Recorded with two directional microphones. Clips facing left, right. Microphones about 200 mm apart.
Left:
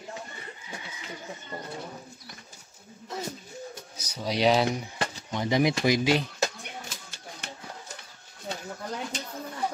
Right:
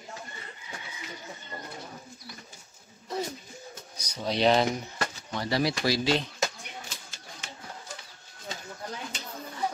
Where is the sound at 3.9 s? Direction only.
10° left (ahead or behind).